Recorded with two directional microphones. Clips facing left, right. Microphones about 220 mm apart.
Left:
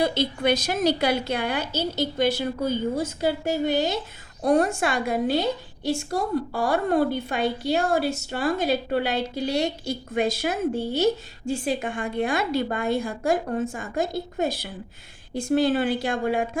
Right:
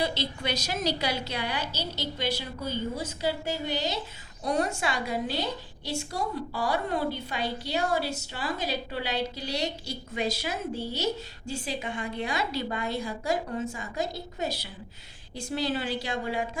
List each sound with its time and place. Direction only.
0.0 s a woman's voice: 50° left (ahead or behind)